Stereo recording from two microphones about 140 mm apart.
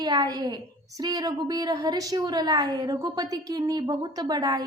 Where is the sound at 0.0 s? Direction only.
30° right (ahead or behind).